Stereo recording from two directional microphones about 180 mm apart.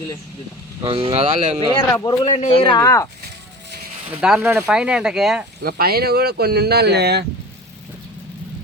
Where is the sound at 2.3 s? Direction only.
35° left (ahead or behind).